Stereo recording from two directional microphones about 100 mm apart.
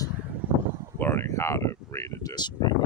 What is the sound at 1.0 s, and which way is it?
Speech, 25° left (ahead or behind).